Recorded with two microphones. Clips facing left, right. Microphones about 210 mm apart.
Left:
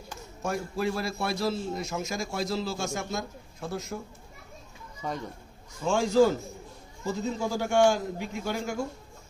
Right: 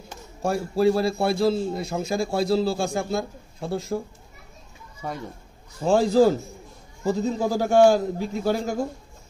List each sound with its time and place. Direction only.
0.4 s a man's voice: 30° right (ahead or behind)
5.0 s speech: 10° right (ahead or behind)
5.8 s a man's voice: 35° right (ahead or behind)